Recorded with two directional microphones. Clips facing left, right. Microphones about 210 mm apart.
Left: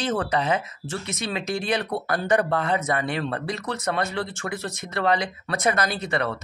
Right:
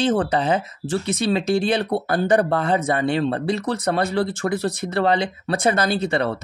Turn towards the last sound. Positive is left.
turn(degrees=-30)  # may be behind; listen again after turning